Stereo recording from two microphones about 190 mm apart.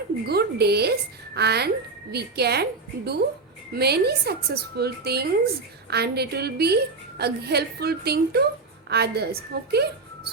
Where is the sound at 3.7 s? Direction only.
60° right (ahead or behind).